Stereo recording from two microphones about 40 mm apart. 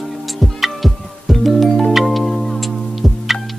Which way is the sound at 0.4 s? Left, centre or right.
Centre.